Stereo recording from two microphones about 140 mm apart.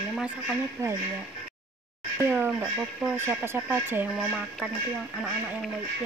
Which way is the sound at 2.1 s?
15° right (ahead or behind).